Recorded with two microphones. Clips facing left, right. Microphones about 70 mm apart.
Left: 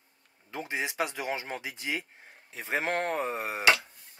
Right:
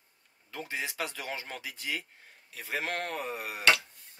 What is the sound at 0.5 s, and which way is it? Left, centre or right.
Speech, left.